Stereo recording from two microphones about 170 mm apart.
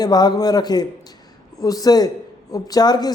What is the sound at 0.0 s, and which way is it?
A man's voice, 25° left (ahead or behind).